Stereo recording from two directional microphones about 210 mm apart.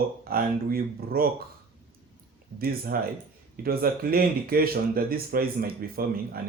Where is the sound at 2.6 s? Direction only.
45° right (ahead or behind).